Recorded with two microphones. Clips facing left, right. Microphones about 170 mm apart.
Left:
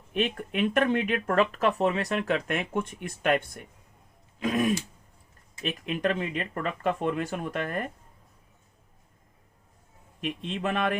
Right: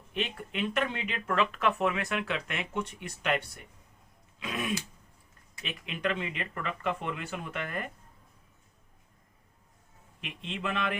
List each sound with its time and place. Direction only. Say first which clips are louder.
0.1 s speech: left 6 dB; 50° left (ahead or behind)
4.4 s throat clearing: left 9 dB; 45° left (ahead or behind)
5.6 s speech: left 5 dB; 45° left (ahead or behind)
10.2 s speech: left 7 dB; 45° left (ahead or behind)